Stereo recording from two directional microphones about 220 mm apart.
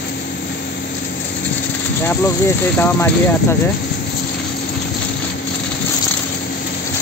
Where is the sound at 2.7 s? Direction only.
10° left (ahead or behind).